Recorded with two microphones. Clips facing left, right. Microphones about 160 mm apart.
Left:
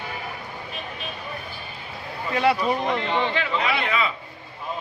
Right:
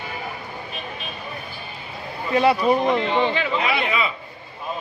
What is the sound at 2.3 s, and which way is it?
A man's voice, 20° right (ahead or behind).